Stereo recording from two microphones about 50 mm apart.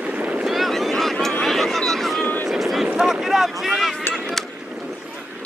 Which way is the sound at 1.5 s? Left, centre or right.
Centre.